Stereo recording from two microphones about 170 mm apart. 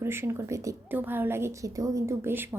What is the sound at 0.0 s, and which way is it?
Speech, 15° right (ahead or behind).